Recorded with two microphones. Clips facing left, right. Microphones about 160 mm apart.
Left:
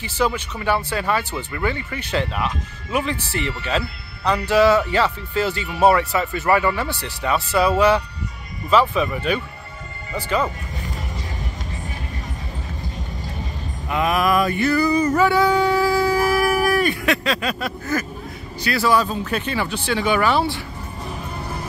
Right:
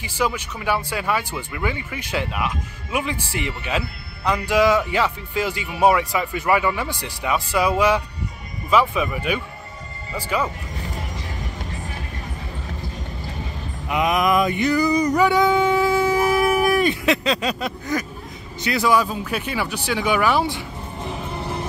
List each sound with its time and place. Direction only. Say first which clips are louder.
0.0 s speech: left 2 dB; 10° right (ahead or behind)
13.8 s male singing: even; 15° right (ahead or behind)
18.6 s speech: even; 20° right (ahead or behind)